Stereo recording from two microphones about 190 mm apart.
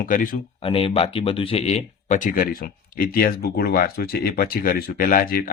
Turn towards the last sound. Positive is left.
turn(degrees=50)  # may be behind; listen again after turning